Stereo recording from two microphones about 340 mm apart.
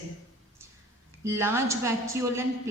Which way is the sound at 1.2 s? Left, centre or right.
Centre.